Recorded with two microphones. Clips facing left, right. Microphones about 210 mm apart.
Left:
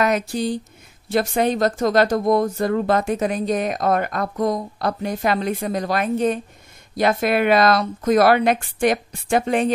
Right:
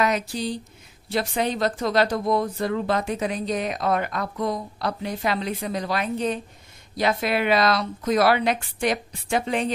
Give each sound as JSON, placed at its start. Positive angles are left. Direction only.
{"t": 0.0, "sound": "speech", "side_deg": 50}